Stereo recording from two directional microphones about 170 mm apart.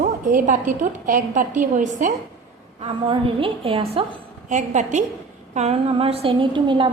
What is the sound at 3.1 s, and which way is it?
Speech, 30° right (ahead or behind).